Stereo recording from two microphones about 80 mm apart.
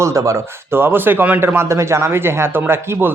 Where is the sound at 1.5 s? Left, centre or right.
Right.